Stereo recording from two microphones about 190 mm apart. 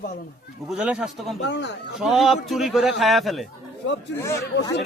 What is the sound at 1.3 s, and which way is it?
Speech, 65° left (ahead or behind).